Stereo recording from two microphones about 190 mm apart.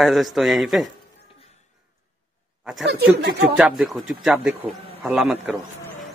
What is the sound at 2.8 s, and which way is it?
Speech, 60° right (ahead or behind).